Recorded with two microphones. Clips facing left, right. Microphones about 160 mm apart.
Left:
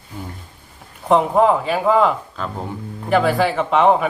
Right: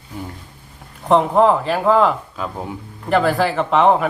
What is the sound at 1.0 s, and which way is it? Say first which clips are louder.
A man's voice: right 1 dB; centre (ahead or behind).